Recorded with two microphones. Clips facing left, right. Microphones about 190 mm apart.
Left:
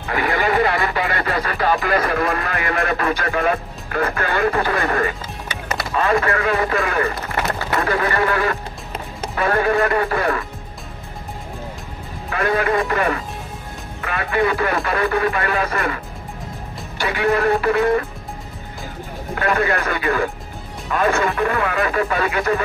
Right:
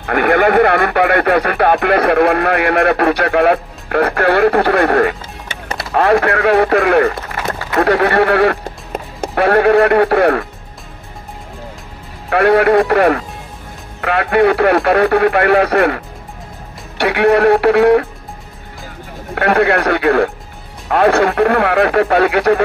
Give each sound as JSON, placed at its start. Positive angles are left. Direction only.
{"t": 0.0, "sound": "speech", "side_deg": -60}
{"t": 5.5, "sound": "music", "side_deg": -25}
{"t": 5.9, "sound": "speech", "side_deg": -65}
{"t": 8.9, "sound": "music", "side_deg": -45}
{"t": 9.4, "sound": "speech", "side_deg": -65}
{"t": 12.3, "sound": "speech", "side_deg": -65}
{"t": 17.0, "sound": "speech", "side_deg": -65}
{"t": 19.3, "sound": "speech", "side_deg": -65}